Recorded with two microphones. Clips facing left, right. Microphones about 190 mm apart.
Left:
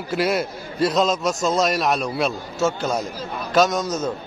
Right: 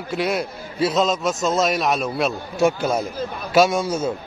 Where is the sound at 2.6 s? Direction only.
15° right (ahead or behind).